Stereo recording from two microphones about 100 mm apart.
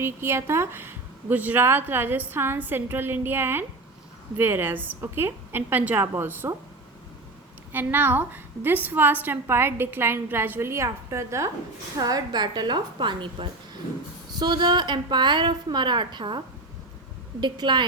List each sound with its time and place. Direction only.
0.0 s a woman's voice: 25° right (ahead or behind)
7.7 s a woman's voice: 20° right (ahead or behind); by 16.4 s 50° right (ahead or behind)
17.4 s a woman's voice: 50° right (ahead or behind)